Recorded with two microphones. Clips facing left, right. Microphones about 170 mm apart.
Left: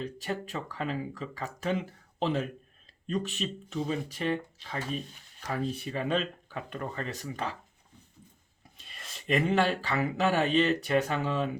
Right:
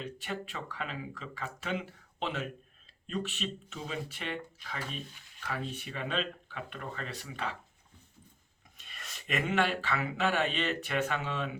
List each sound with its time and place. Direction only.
0.0 s speech: 35° left (ahead or behind)
8.8 s speech: 30° left (ahead or behind)